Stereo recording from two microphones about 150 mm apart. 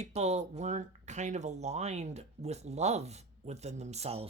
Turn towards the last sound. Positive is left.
turn(degrees=-40)  # may be behind; listen again after turning